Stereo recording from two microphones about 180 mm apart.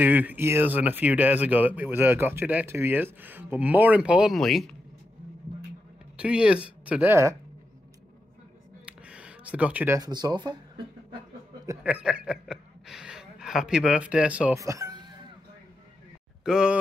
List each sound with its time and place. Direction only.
0.0 s speech: 10° right (ahead or behind)
6.1 s speech: 5° right (ahead or behind)
8.8 s a sound: 5° right (ahead or behind)
9.9 s speech: 20° right (ahead or behind)
11.6 s speech: 10° right (ahead or behind)
14.6 s music: 20° right (ahead or behind)
16.4 s speech: 5° right (ahead or behind)